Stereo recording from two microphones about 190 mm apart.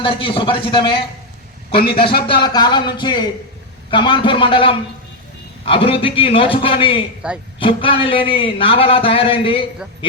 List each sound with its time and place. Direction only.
0.0 s speech: 25° left (ahead or behind)
1.7 s a man's voice: 55° left (ahead or behind)
2.2 s speech: 25° left (ahead or behind)
7.2 s a man's voice: 5° right (ahead or behind)
7.6 s speech: 25° left (ahead or behind)